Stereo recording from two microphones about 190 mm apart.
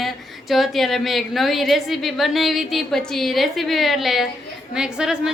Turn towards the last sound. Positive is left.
turn(degrees=-5)  # may be behind; listen again after turning